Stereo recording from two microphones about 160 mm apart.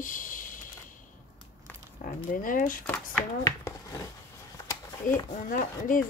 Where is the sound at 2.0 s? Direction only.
60° left (ahead or behind).